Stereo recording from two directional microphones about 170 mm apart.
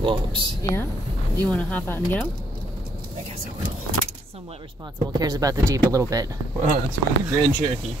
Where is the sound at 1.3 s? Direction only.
10° left (ahead or behind).